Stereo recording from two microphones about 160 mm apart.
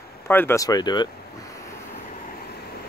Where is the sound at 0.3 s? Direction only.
15° left (ahead or behind).